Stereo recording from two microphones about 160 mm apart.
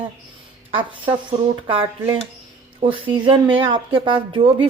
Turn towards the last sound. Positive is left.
turn(degrees=-35)  # may be behind; listen again after turning